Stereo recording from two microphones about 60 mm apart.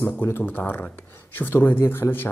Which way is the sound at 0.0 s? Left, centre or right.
Left.